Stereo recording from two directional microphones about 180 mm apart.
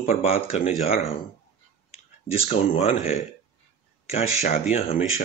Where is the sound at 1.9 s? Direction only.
35° left (ahead or behind).